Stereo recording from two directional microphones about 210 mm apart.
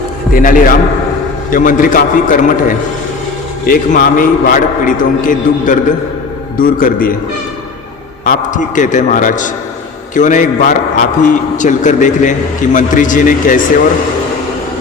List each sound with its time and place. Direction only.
0.3 s a man's voice: 40° left (ahead or behind)
8.2 s a man's voice: 40° left (ahead or behind)